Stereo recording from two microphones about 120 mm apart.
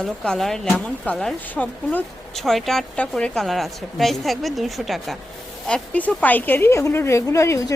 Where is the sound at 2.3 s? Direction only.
Centre (ahead or behind).